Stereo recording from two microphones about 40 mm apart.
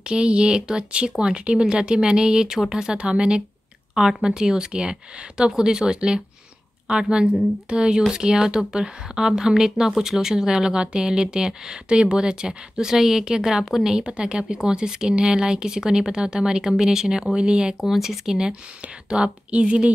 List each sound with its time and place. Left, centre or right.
0.0 s speech: right; by 13.9 s centre
13.9 s speech: right
17.7 s speech: centre; by 19.9 s right